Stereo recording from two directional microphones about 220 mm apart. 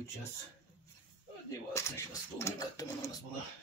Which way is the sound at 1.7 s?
15° left (ahead or behind).